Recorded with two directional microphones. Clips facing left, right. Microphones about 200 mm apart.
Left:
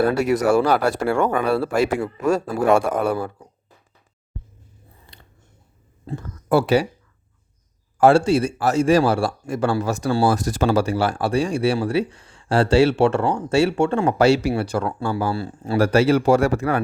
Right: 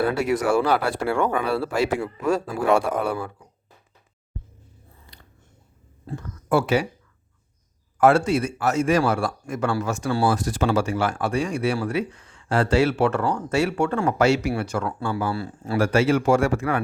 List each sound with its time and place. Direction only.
0.0 s a man's voice: 40° left (ahead or behind)
5.1 s biting: 25° left (ahead or behind)
6.1 s speech: 30° left (ahead or behind)
7.9 s a man's voice: 30° left (ahead or behind)